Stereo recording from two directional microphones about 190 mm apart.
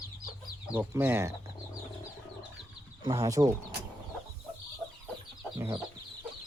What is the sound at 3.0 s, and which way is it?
Speech, 20° right (ahead or behind).